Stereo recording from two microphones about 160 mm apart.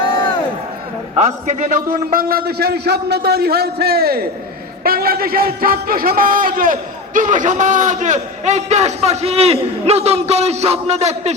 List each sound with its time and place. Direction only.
1.1 s a man's voice: 45° right (ahead or behind)